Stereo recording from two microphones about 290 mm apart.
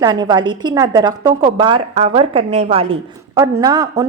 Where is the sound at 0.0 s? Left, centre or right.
Centre.